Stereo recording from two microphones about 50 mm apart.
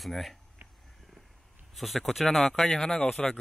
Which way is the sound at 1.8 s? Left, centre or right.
Centre.